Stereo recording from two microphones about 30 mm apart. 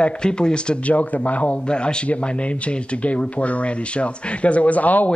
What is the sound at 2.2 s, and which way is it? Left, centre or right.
Speech, left.